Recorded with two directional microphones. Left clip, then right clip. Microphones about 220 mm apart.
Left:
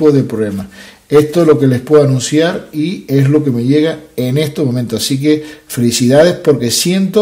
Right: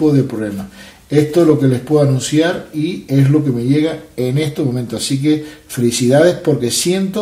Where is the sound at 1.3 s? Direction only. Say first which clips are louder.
Left 3 dB; 45° left (ahead or behind).